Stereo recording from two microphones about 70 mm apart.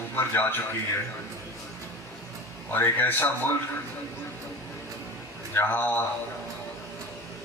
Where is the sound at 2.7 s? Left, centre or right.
Left.